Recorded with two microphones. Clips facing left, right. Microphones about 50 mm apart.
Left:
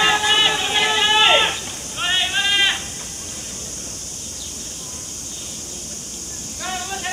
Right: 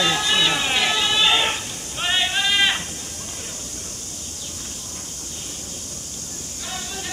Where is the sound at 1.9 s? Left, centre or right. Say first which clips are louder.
Left 1 dB; centre.